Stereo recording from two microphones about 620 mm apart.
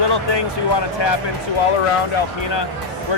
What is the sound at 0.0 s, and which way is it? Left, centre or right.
Speech, left.